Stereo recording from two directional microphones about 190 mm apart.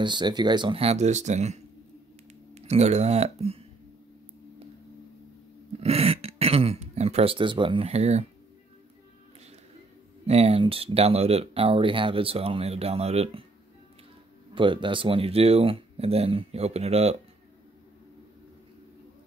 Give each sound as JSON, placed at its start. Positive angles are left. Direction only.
{"t": 0.0, "sound": "speech", "side_deg": -25}
{"t": 5.8, "sound": "throat clearing", "side_deg": -30}
{"t": 10.2, "sound": "speech", "side_deg": -35}
{"t": 14.5, "sound": "speech", "side_deg": -25}